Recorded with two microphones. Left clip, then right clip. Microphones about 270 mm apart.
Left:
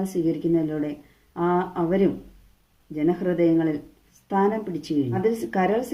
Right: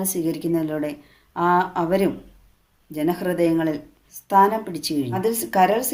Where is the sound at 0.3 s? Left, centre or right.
Right.